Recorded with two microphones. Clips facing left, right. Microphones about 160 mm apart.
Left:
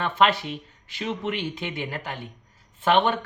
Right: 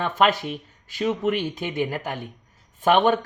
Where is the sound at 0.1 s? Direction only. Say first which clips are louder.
Even; 45° right (ahead or behind).